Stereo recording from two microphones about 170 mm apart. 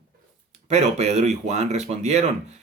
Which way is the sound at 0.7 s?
40° right (ahead or behind).